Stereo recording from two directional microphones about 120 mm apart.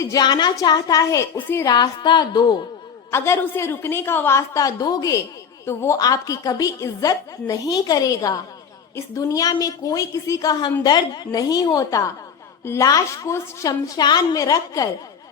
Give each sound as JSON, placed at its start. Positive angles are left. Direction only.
{"t": 0.0, "sound": "a woman's voice", "side_deg": 30}
{"t": 3.1, "sound": "a woman's voice", "side_deg": 25}